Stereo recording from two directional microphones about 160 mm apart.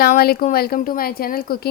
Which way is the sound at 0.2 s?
70° left (ahead or behind).